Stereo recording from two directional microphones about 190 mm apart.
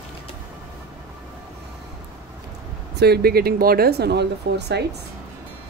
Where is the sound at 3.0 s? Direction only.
55° right (ahead or behind).